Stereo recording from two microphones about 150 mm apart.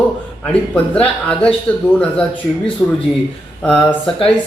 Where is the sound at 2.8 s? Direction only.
20° left (ahead or behind).